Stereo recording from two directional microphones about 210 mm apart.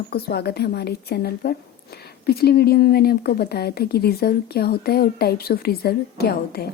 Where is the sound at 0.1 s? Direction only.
50° left (ahead or behind).